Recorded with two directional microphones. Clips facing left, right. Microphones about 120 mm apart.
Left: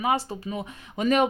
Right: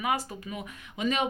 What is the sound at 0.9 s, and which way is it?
Speech, 50° left (ahead or behind).